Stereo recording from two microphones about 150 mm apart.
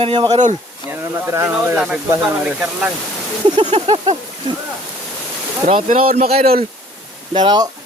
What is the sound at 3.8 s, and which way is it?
Speech, 35° right (ahead or behind).